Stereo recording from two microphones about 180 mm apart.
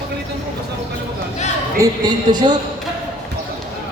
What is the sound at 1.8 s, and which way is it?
Speech, 20° right (ahead or behind).